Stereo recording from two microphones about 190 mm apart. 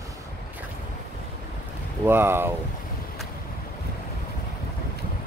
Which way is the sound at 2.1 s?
10° right (ahead or behind).